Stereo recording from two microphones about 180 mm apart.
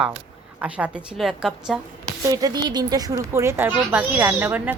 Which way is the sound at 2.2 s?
20° right (ahead or behind).